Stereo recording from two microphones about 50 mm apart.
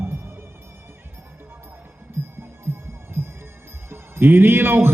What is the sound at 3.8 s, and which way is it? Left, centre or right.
Speech, right.